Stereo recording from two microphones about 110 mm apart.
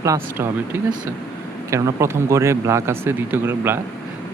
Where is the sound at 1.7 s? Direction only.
25° right (ahead or behind).